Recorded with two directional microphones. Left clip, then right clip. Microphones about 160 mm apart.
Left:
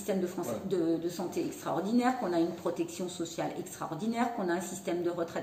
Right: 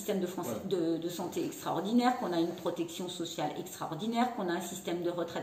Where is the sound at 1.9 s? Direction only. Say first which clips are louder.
Even; centre (ahead or behind).